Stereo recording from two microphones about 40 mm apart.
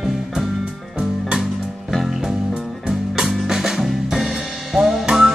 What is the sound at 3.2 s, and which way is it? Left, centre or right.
Drum kit, centre.